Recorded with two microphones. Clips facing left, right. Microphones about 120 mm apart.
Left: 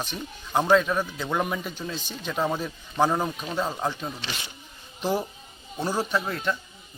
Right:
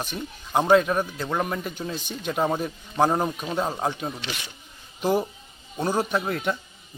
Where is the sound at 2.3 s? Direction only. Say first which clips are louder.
Right 2 dB; 10° right (ahead or behind).